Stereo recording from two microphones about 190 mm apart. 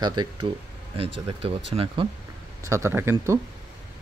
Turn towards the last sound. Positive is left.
turn(degrees=-10)  # may be behind; listen again after turning